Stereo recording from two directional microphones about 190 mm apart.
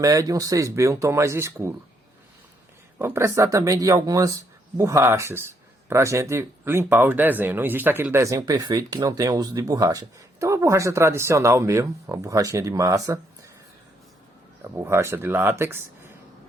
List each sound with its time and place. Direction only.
0.0 s speech: 20° right (ahead or behind)
3.0 s speech: 15° right (ahead or behind)
14.6 s speech: 15° right (ahead or behind)